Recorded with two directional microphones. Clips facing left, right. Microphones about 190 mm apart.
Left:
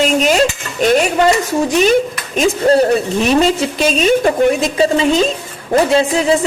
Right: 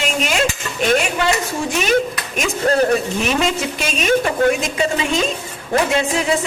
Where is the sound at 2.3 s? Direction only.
30° left (ahead or behind).